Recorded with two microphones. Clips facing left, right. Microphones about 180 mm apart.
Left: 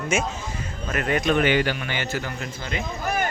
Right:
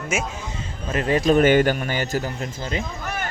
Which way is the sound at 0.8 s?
30° right (ahead or behind).